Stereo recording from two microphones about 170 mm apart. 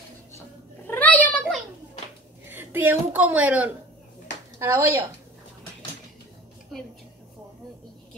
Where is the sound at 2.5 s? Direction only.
10° right (ahead or behind).